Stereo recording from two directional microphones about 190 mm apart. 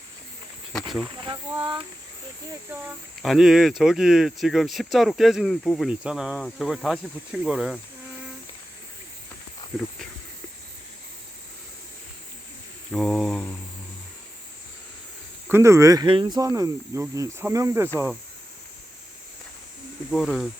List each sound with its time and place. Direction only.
1.0 s speech: 25° right (ahead or behind)
2.5 s speech: 10° right (ahead or behind)
3.2 s speech: centre (ahead or behind)
9.7 s speech: centre (ahead or behind)
12.9 s mantra: 5° left (ahead or behind)
15.4 s speech: 15° right (ahead or behind)
20.1 s speech: 5° left (ahead or behind)